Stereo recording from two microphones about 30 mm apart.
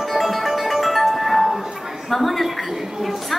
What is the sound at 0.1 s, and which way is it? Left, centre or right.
Music, centre.